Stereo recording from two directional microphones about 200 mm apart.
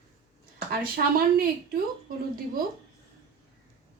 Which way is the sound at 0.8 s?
45° right (ahead or behind).